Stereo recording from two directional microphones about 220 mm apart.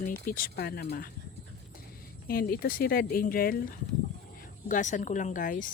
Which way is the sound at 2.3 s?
40° left (ahead or behind).